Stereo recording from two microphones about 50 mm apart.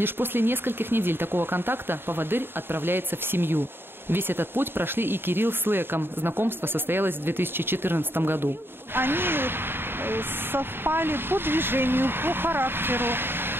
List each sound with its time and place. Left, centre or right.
0.0 s speech: right